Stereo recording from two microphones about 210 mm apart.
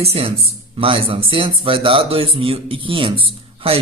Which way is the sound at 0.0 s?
25° right (ahead or behind).